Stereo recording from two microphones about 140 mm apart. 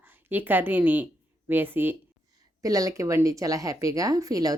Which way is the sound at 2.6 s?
25° right (ahead or behind).